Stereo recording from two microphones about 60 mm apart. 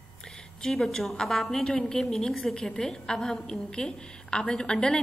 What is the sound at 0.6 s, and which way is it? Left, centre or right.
A woman's voice, centre.